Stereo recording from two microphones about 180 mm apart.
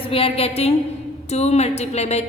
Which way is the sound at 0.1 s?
30° left (ahead or behind).